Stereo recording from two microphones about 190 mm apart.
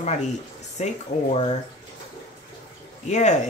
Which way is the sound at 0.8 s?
35° left (ahead or behind).